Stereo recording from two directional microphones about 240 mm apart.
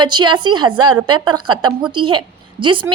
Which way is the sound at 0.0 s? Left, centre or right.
Centre.